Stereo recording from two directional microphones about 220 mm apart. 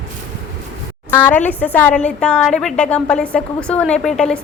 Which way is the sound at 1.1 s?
10° left (ahead or behind).